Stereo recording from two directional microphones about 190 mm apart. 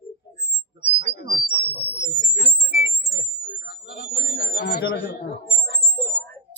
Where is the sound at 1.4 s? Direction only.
30° right (ahead or behind).